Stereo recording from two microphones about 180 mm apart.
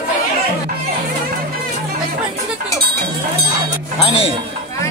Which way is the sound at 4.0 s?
30° left (ahead or behind).